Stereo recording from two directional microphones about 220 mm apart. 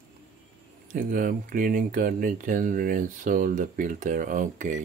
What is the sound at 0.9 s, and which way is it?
Speech, 40° right (ahead or behind).